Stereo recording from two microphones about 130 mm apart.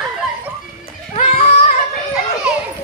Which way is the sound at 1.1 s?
60° left (ahead or behind).